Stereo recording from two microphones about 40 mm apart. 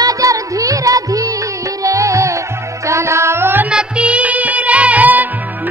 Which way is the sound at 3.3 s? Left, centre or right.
Right.